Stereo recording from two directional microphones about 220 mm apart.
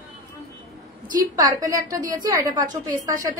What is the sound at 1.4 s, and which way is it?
A woman's voice, 15° right (ahead or behind).